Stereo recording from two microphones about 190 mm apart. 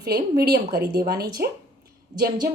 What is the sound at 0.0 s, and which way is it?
Speech, 55° right (ahead or behind).